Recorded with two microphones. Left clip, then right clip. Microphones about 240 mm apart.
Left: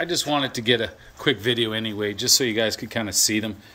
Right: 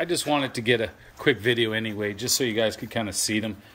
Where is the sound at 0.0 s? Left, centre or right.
Centre.